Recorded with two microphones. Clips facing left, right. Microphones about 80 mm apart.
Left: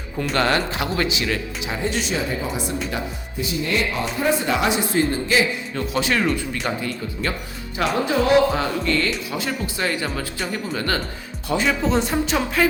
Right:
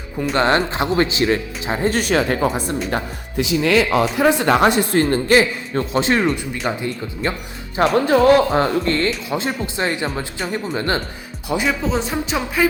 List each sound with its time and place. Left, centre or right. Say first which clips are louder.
0.3 s speech: right 4 dB; right
2.6 s speech: right 4 dB; right
3.3 s speech: right 7 dB; right
5.7 s speech: right 5 dB; right
7.8 s speech: right 6 dB; right
11.4 s speech: even; centre